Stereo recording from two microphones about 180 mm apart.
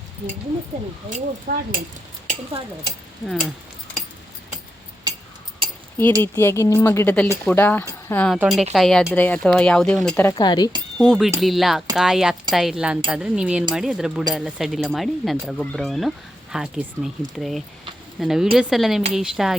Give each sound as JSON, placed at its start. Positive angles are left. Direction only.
{"t": 1.1, "sound": "speech", "side_deg": -50}
{"t": 2.2, "sound": "speech", "side_deg": -30}
{"t": 3.2, "sound": "speech", "side_deg": 0}
{"t": 5.6, "sound": "a sound", "side_deg": -30}
{"t": 6.2, "sound": "speech", "side_deg": 15}
{"t": 10.3, "sound": "speech", "side_deg": 25}
{"t": 10.9, "sound": "speech", "side_deg": 0}